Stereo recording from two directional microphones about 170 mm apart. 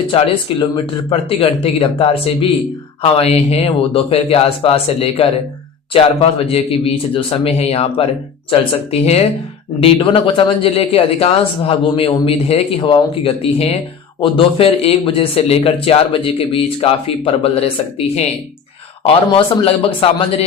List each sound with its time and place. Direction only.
0.1 s speech: 30° left (ahead or behind)